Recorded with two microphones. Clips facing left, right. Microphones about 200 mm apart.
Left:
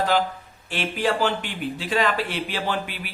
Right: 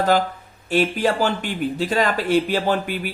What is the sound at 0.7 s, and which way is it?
Speech, 40° right (ahead or behind).